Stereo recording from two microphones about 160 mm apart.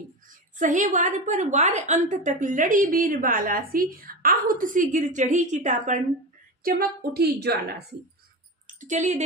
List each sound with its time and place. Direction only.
0.6 s a woman's voice: 50° right (ahead or behind)
6.6 s a woman's voice: 65° right (ahead or behind); by 7.8 s 90° right
8.6 s speech: 50° right (ahead or behind)